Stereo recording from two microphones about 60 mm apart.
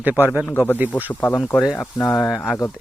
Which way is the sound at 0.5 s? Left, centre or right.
Left.